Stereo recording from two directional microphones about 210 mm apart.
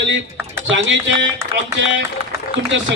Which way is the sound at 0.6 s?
60° right (ahead or behind).